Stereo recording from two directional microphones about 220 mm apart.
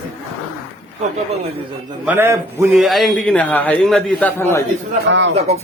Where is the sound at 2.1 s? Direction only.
10° right (ahead or behind).